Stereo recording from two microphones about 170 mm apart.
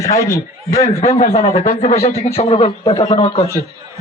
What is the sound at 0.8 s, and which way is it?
A man's voice, 40° left (ahead or behind).